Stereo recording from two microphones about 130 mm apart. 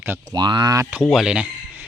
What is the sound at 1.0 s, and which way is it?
Speech, centre (ahead or behind).